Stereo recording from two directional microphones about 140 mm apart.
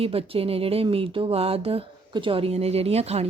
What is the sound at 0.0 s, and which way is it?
Speech, 45° right (ahead or behind).